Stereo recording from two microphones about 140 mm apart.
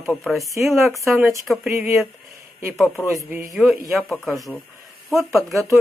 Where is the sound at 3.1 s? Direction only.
20° right (ahead or behind).